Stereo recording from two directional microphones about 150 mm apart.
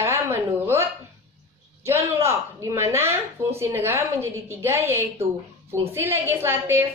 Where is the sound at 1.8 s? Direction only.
20° right (ahead or behind).